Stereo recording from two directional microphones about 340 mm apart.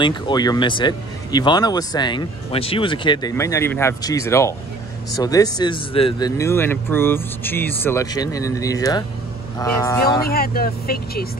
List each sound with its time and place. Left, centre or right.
0.0 s speech: centre
10.2 s speech: left